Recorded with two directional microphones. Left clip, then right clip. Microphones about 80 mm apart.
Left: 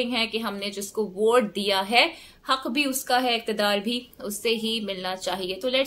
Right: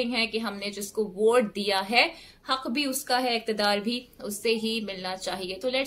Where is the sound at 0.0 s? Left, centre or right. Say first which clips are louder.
Left 2 dB; left.